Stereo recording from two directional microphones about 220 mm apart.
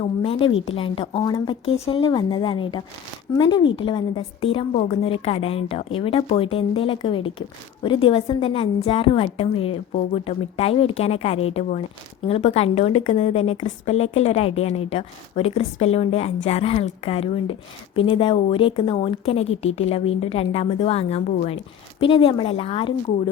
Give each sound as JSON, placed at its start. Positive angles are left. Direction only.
{"t": 0.0, "sound": "a woman's voice", "side_deg": 25}